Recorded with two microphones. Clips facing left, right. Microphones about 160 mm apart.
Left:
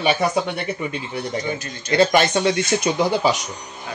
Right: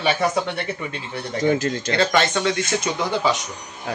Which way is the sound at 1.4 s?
90° right.